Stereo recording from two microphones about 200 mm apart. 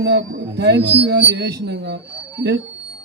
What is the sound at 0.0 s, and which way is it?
Speech, 60° right (ahead or behind).